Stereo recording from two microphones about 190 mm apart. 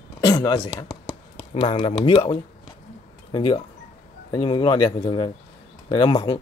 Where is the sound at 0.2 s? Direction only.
20° left (ahead or behind).